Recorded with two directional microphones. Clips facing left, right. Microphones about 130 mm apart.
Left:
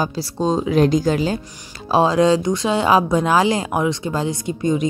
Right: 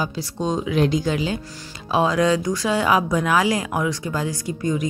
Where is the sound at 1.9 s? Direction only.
30° left (ahead or behind).